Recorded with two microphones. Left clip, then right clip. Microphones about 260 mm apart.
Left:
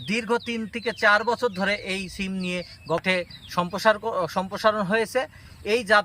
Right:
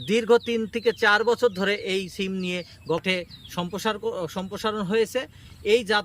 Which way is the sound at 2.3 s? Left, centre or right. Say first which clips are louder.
Even; centre.